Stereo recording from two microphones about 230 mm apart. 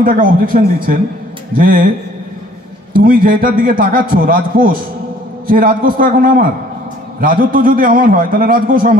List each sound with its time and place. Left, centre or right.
0.0 s a man's voice: right
3.0 s a man's voice: right